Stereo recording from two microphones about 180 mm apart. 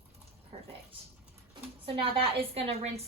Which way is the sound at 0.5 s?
30° right (ahead or behind).